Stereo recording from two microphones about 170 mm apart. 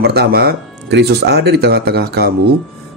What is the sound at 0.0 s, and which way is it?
Speech, 70° right (ahead or behind).